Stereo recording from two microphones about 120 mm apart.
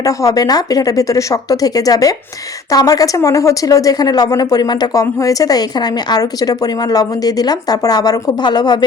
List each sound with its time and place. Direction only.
0.0 s speech: 30° left (ahead or behind)